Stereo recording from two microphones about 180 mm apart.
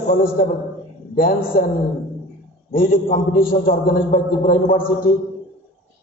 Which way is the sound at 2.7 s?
50° left (ahead or behind).